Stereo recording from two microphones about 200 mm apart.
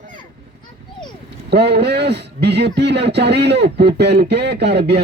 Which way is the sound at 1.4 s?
55° right (ahead or behind).